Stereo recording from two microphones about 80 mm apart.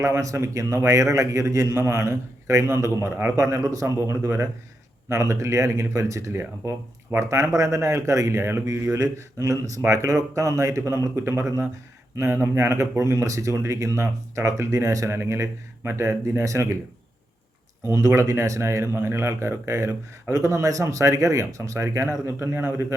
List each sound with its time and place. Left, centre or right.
0.0 s speech: right
17.8 s speech: right